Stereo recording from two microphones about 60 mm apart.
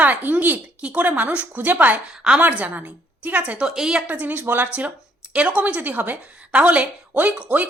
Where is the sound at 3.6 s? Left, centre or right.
Centre.